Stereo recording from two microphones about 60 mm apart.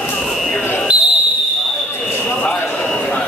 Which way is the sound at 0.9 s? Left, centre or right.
Centre.